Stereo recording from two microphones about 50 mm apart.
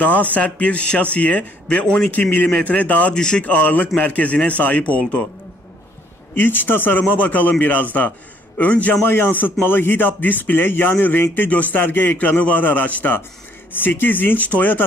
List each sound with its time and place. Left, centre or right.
0.0 s speech: left
3.2 s speech: centre
3.4 s a man's voice: left
6.3 s a man's voice: left
9.0 s a man's voice: left